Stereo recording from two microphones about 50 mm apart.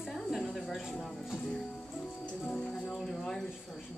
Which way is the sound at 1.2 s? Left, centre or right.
Centre.